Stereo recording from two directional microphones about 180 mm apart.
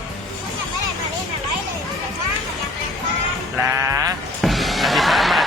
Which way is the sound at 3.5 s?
15° right (ahead or behind).